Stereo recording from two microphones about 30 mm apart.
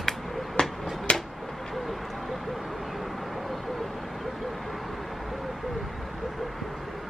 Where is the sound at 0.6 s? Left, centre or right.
Left.